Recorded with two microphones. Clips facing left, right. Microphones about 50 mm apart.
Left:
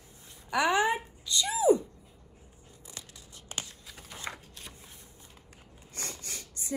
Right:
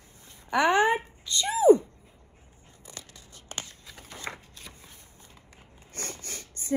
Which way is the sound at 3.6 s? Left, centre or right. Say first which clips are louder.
Right 1 dB; right.